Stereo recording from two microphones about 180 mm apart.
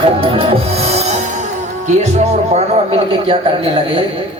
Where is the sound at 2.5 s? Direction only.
35° right (ahead or behind).